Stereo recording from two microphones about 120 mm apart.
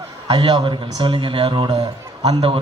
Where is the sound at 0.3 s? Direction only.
35° right (ahead or behind).